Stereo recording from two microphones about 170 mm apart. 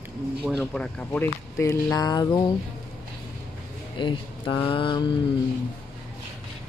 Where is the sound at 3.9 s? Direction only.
30° left (ahead or behind).